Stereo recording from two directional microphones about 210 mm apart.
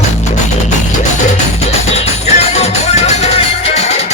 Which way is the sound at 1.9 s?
30° left (ahead or behind).